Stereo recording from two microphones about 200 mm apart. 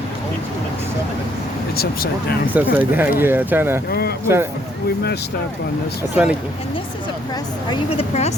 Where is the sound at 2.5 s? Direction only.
10° right (ahead or behind).